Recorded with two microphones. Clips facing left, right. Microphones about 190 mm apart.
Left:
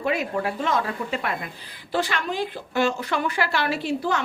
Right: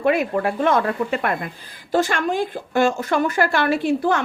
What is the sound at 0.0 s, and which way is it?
Speech, 55° right (ahead or behind).